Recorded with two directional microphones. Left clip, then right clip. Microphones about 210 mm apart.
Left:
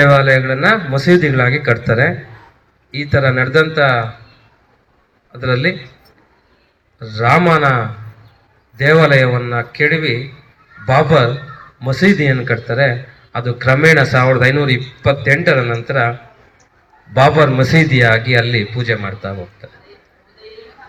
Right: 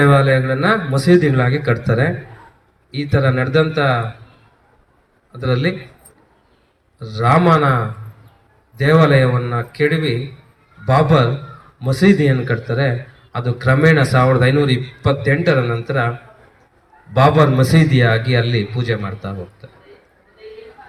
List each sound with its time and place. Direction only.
0.0 s a man's voice: 45° right (ahead or behind)
7.0 s a man's voice: 45° right (ahead or behind)
8.9 s a man's voice: 45° right (ahead or behind)
17.2 s a man's voice: 40° right (ahead or behind)